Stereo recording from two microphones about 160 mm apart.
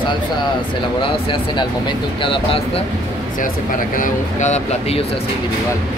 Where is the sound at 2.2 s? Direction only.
35° left (ahead or behind).